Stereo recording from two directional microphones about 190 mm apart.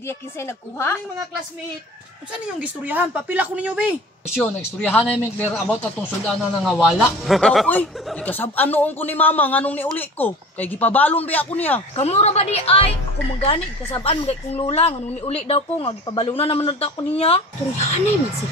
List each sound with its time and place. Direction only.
0.4 s speech: 15° left (ahead or behind)
2.4 s speech: 10° right (ahead or behind)
4.4 s a man's voice: 10° left (ahead or behind)
11.9 s a woman's voice: 35° left (ahead or behind)